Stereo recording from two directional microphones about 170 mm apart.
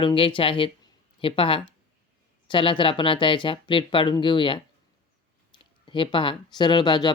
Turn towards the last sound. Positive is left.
turn(degrees=25)  # may be behind; listen again after turning